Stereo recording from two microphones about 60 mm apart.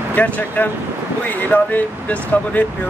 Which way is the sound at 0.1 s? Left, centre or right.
Left.